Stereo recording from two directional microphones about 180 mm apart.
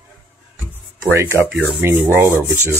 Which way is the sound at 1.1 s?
15° right (ahead or behind).